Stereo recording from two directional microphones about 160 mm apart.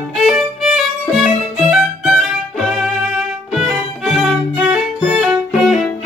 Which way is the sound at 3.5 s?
5° right (ahead or behind).